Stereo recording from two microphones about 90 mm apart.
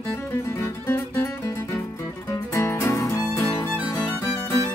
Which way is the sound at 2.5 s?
35° left (ahead or behind).